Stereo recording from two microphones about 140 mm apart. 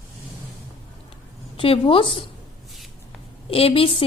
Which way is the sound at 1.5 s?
40° left (ahead or behind).